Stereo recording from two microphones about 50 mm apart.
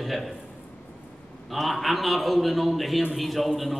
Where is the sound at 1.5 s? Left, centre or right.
Centre.